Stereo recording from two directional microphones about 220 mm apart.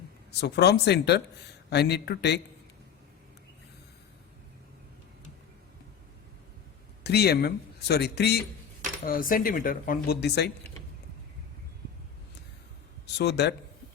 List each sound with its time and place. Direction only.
0.3 s speech: 50° left (ahead or behind)
7.0 s speech: 45° left (ahead or behind)
13.1 s speech: 50° left (ahead or behind)